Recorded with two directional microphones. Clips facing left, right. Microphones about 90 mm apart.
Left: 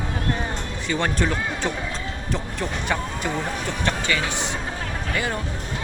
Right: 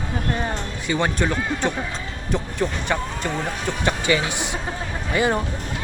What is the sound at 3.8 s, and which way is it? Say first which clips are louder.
Speech: right 4 dB; 15° right (ahead or behind).